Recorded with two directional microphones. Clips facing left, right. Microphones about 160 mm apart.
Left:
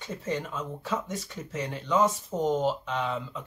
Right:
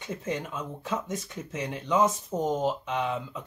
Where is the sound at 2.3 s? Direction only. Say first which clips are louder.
Left 2 dB; centre (ahead or behind).